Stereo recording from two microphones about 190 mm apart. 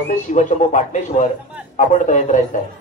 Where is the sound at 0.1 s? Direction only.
40° left (ahead or behind).